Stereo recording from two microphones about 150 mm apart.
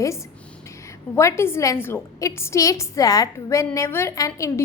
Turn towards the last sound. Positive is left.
turn(degrees=20)  # may be behind; listen again after turning